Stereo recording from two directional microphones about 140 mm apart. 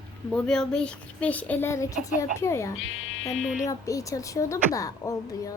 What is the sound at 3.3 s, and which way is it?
Speech, 55° left (ahead or behind).